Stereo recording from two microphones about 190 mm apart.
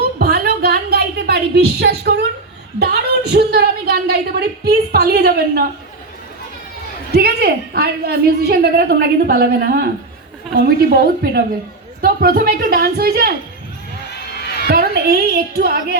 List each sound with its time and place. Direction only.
0.2 s a sound: 55° right (ahead or behind)
2.7 s a woman's voice: 60° right (ahead or behind)
7.1 s a woman's voice: 55° right (ahead or behind)
10.9 s a woman's voice: 55° right (ahead or behind)
14.7 s a woman's voice: 55° right (ahead or behind)